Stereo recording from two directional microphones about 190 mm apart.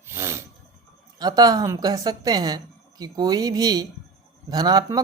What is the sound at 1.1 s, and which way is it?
A woman's voice, 20° right (ahead or behind).